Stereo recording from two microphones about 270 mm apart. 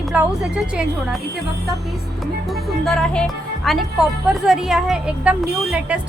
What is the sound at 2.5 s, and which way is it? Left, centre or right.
Music, centre.